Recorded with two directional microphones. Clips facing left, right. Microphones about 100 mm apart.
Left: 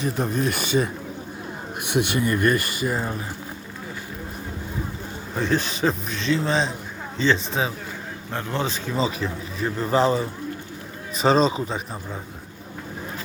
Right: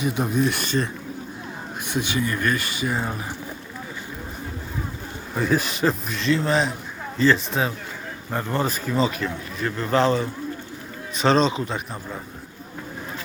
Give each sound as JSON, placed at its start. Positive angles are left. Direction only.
{"t": 0.0, "sound": "a man's voice", "side_deg": -5}
{"t": 1.8, "sound": "speech", "side_deg": 65}
{"t": 2.8, "sound": "a man's voice", "side_deg": 0}
{"t": 5.3, "sound": "a man's voice", "side_deg": -5}